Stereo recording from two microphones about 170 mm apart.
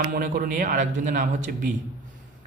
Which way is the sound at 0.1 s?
55° right (ahead or behind).